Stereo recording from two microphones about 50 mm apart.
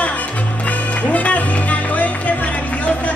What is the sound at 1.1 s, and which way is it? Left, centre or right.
Music, left.